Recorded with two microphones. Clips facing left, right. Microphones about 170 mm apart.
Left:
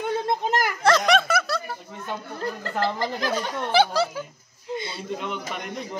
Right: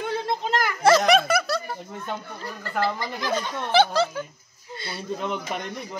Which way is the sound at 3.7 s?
10° left (ahead or behind).